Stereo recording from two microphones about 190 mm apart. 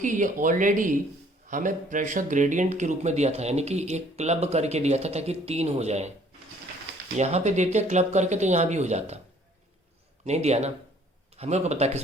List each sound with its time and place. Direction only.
0.0 s speech: 40° right (ahead or behind)
7.2 s speech: 35° right (ahead or behind)
10.2 s speech: 35° right (ahead or behind)